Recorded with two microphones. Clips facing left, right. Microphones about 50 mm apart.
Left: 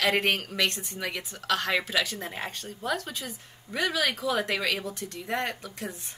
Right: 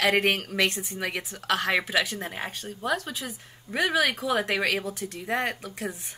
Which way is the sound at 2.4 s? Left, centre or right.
Centre.